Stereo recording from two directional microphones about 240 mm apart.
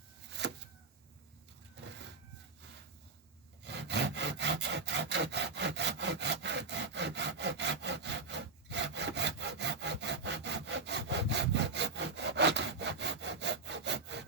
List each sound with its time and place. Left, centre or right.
0.4 s vehicle: right
1.8 s a sound: right
3.6 s wood: right